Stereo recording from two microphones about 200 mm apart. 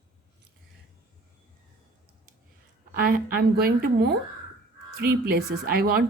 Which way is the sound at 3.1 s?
50° right (ahead or behind).